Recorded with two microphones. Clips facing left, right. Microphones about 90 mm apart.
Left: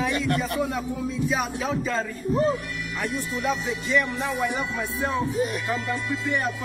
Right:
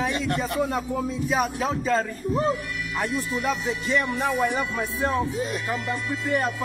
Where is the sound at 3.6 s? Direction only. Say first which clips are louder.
Even; 40° right (ahead or behind).